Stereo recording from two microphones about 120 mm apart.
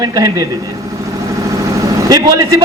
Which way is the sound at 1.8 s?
30° right (ahead or behind).